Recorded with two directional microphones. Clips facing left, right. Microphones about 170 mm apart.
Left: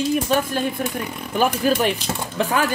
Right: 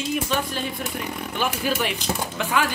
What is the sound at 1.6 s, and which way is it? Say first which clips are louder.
Speech: left 5 dB; 40° left (ahead or behind).